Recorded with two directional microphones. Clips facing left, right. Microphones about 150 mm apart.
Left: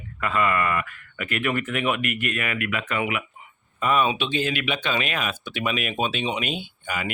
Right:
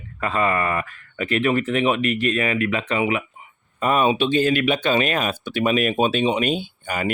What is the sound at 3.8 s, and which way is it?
Speech, 40° right (ahead or behind).